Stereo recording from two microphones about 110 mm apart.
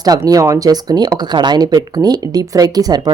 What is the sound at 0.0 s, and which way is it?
Speech, 35° right (ahead or behind).